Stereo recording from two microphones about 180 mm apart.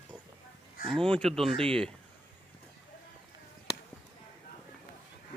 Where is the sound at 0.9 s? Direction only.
5° left (ahead or behind).